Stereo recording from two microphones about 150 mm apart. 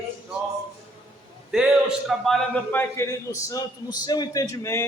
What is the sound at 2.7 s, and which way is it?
A man's voice, 20° left (ahead or behind).